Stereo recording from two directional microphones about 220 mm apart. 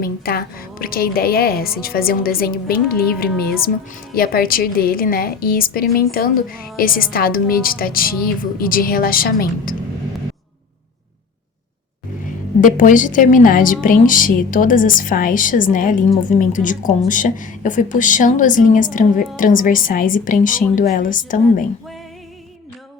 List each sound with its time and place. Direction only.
0.0 s a woman's voice: 45° left (ahead or behind)
12.6 s a woman's voice: 35° left (ahead or behind)